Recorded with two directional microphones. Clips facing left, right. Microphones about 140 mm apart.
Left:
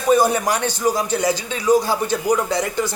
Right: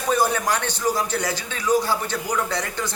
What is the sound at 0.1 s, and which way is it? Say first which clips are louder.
Speech: left 5 dB; 15° left (ahead or behind).